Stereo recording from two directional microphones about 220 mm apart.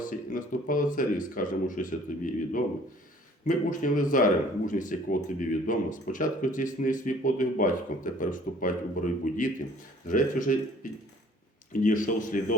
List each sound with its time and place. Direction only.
0.0 s speech: 40° left (ahead or behind)
11.7 s speech: 35° left (ahead or behind)